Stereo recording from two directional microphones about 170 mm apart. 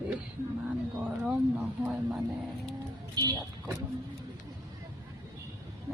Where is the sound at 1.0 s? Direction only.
5° right (ahead or behind).